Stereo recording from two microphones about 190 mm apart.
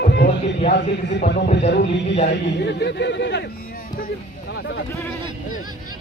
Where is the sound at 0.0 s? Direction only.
65° left (ahead or behind).